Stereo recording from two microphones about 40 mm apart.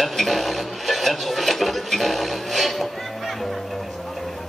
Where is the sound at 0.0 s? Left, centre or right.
Centre.